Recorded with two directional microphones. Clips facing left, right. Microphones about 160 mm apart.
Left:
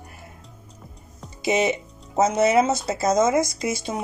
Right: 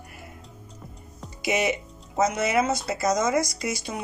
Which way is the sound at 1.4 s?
25° left (ahead or behind).